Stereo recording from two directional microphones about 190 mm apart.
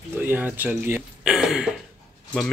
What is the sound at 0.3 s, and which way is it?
Speech, 10° right (ahead or behind).